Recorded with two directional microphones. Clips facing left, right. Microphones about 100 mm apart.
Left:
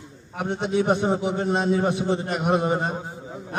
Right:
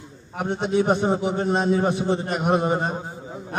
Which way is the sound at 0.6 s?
35° right (ahead or behind).